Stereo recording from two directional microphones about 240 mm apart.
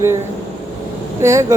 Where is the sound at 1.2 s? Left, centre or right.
Centre.